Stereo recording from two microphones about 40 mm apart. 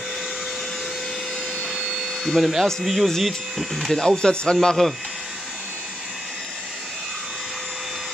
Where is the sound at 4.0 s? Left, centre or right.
Centre.